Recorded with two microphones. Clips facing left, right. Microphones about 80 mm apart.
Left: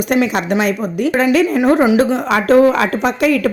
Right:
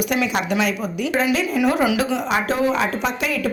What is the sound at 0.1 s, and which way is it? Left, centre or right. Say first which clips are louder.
Speech: left 6 dB; left.